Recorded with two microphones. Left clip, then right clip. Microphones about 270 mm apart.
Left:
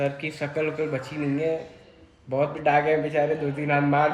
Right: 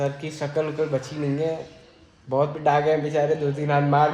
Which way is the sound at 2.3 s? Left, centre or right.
Centre.